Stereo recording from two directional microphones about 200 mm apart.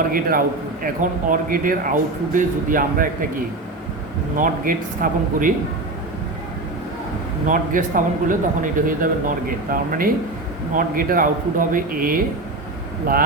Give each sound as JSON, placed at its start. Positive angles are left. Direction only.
{"t": 0.1, "sound": "a man's voice", "side_deg": -45}
{"t": 4.4, "sound": "a man's voice", "side_deg": -45}
{"t": 7.4, "sound": "a man's voice", "side_deg": -40}